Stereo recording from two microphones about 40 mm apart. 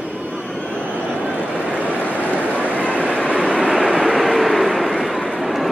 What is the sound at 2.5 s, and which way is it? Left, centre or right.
Vehicle, left.